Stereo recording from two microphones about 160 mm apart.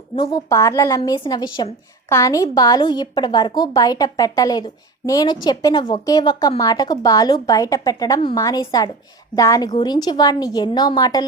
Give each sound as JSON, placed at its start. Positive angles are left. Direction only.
{"t": 0.2, "sound": "a woman's voice", "side_deg": 20}